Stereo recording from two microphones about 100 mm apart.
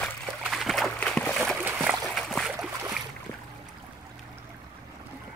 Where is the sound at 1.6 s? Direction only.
20° right (ahead or behind).